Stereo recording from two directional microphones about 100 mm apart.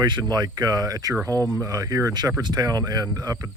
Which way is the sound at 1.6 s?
35° right (ahead or behind).